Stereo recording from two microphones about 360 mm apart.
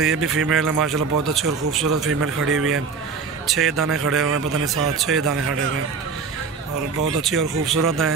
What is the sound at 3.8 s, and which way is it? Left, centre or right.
Speech, right.